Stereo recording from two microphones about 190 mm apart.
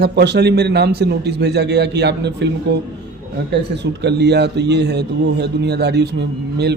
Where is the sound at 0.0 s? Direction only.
60° right (ahead or behind).